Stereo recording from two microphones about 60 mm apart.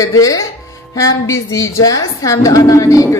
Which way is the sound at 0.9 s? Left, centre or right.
Left.